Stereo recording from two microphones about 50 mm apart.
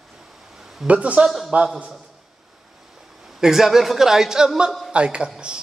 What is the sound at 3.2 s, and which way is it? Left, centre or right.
A man's voice, centre.